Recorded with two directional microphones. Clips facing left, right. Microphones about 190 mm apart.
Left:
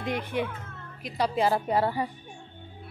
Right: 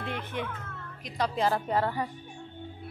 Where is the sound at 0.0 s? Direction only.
15° left (ahead or behind).